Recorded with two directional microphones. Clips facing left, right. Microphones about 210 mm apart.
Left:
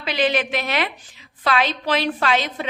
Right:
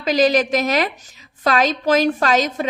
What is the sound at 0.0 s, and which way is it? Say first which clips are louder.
A woman's voice: right 5 dB; 40° right (ahead or behind).